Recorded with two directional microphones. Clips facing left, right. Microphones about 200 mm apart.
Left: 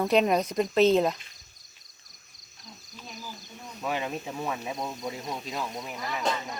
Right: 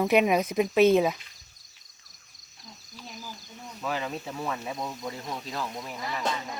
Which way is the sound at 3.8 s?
15° left (ahead or behind).